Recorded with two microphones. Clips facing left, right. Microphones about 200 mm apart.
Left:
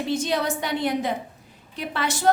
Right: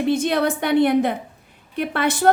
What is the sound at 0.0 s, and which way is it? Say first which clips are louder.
A woman's voice: right 5 dB; 55° right (ahead or behind).